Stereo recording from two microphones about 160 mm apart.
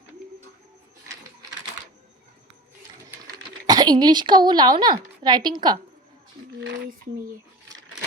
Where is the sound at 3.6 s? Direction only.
25° right (ahead or behind).